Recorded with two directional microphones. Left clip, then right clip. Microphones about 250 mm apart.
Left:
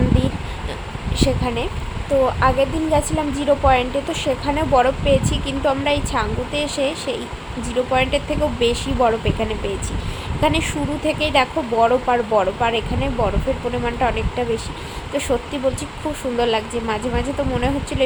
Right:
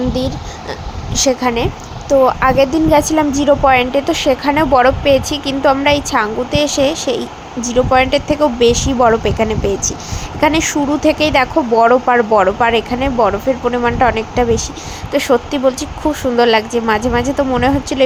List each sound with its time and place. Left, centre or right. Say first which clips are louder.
1.1 s speech: right 7 dB; right